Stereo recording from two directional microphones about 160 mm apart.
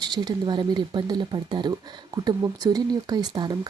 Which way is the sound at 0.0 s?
25° right (ahead or behind).